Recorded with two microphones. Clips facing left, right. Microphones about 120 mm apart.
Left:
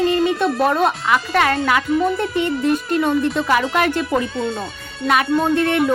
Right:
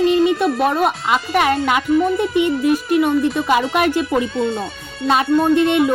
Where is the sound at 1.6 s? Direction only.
20° right (ahead or behind); by 4.7 s centre (ahead or behind).